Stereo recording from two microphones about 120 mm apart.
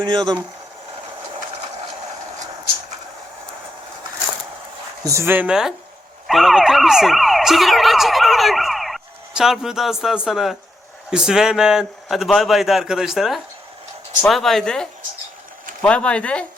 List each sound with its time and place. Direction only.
0.0 s speech: 35° right (ahead or behind)
5.0 s speech: 25° right (ahead or behind)
5.5 s a man's voice: 5° right (ahead or behind)
6.2 s emergency vehicle: centre (ahead or behind)
11.1 s a man's voice: 5° right (ahead or behind); by 16.5 s 10° left (ahead or behind)